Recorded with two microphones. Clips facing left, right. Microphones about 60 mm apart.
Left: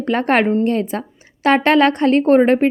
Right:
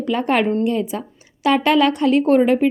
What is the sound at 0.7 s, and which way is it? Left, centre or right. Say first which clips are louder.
Speech: left 2 dB; left.